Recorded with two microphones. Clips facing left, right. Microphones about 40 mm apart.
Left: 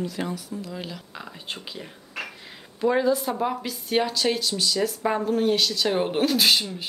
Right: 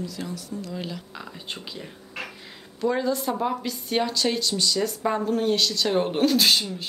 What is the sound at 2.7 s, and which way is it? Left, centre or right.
Speech, centre.